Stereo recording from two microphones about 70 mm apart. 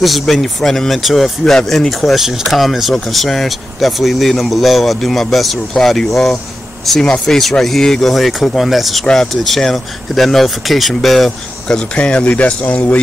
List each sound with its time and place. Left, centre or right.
0.0 s speech: centre
11.9 s speech: centre